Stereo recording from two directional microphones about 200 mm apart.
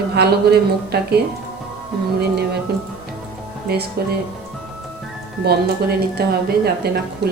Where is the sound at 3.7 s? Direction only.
50° right (ahead or behind).